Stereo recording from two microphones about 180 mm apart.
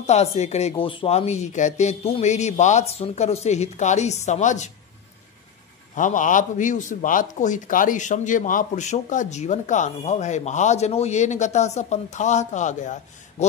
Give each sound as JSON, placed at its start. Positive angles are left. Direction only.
{"t": 0.0, "sound": "a man's voice", "side_deg": 40}
{"t": 5.9, "sound": "a man's voice", "side_deg": 45}